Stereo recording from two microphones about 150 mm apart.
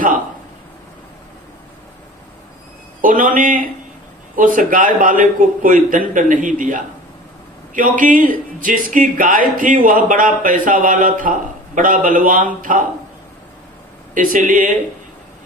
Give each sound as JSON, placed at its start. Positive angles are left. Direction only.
{"t": 3.0, "sound": "speech", "side_deg": -65}
{"t": 14.1, "sound": "speech", "side_deg": -60}